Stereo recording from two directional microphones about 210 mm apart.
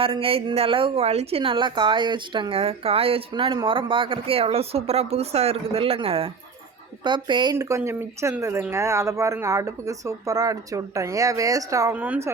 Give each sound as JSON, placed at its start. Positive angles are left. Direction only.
{"t": 0.0, "sound": "a woman's voice", "side_deg": -25}